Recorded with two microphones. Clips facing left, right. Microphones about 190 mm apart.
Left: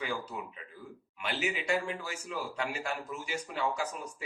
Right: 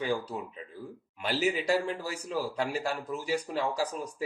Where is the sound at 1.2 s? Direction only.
35° right (ahead or behind).